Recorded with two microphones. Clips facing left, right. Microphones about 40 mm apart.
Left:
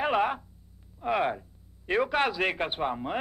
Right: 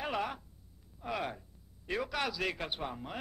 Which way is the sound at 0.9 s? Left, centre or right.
Left.